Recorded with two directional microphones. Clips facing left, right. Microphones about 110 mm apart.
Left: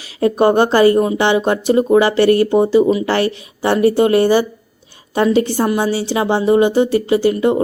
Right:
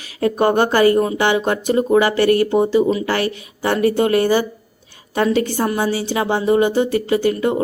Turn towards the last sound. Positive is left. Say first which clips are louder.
# left 3 dB
turn(degrees=25)  # may be behind; listen again after turning